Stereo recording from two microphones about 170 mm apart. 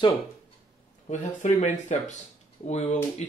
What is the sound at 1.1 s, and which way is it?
Speech, 45° left (ahead or behind).